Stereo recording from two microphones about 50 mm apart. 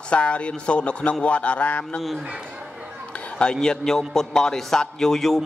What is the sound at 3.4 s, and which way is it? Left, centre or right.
A man's voice, centre.